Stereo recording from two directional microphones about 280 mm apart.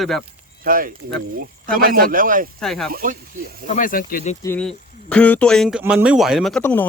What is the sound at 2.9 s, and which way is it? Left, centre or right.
Speech, right.